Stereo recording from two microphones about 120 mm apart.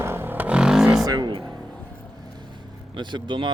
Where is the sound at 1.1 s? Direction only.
40° right (ahead or behind).